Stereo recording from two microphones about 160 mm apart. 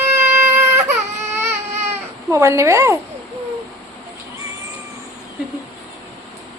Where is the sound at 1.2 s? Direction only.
45° right (ahead or behind).